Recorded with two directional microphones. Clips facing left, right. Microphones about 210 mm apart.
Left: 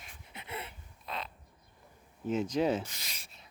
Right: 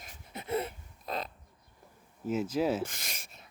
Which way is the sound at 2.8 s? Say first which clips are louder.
Right 8 dB; 50° right (ahead or behind).